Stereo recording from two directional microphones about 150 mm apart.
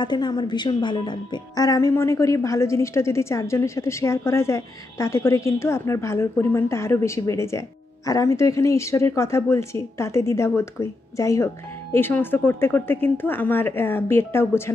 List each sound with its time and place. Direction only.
0.0 s a woman's voice: 30° left (ahead or behind)